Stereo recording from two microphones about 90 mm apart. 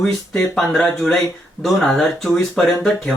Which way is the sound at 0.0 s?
5° left (ahead or behind).